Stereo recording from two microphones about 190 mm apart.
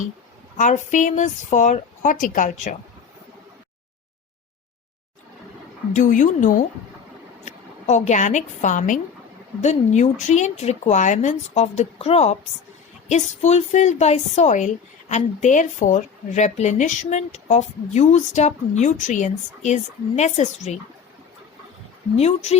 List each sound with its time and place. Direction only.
0.5 s speech: 40° left (ahead or behind)
5.9 s a woman's voice: 40° left (ahead or behind)
22.1 s speech: 35° left (ahead or behind)